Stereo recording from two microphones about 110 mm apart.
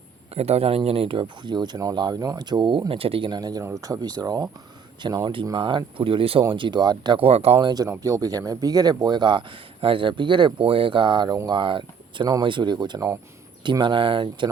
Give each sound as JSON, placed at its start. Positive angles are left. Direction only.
{"t": 0.3, "sound": "a man's voice", "side_deg": -70}
{"t": 3.6, "sound": "speech", "side_deg": -25}
{"t": 3.8, "sound": "speech", "side_deg": -35}
{"t": 7.2, "sound": "speech", "side_deg": -65}
{"t": 7.6, "sound": "speech", "side_deg": -40}